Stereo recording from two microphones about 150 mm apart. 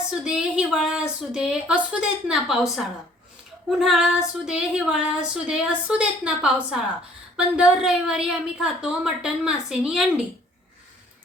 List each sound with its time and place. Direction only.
0.1 s female singing: 5° right (ahead or behind)